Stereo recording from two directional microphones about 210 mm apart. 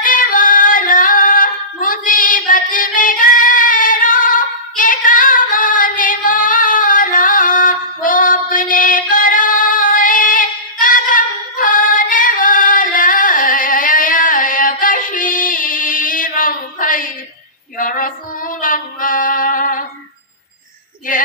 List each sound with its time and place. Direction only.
0.0 s singing: 40° left (ahead or behind)
17.7 s female singing: 40° left (ahead or behind)
21.1 s female singing: 40° left (ahead or behind)